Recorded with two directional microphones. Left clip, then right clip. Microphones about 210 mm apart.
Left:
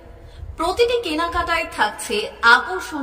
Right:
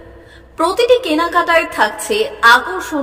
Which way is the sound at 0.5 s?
15° right (ahead or behind).